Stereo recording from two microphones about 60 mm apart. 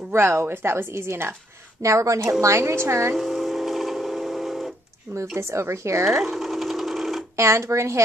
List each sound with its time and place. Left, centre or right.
0.1 s speech: right
1.8 s speech: right
3.2 s music: centre
5.1 s a woman's voice: right
6.2 s sewing machine: centre
7.3 s speech: right